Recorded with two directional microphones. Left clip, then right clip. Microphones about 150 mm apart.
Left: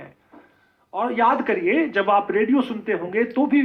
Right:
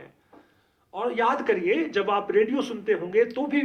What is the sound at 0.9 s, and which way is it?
A man's voice, 35° left (ahead or behind).